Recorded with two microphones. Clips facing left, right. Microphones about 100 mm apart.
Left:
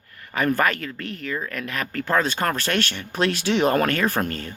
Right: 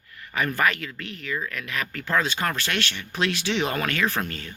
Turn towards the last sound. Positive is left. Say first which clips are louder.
# left 3 dB
turn(degrees=45)  # may be behind; listen again after turning